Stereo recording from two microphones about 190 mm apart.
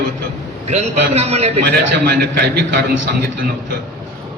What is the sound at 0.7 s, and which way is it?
Speech, 35° right (ahead or behind).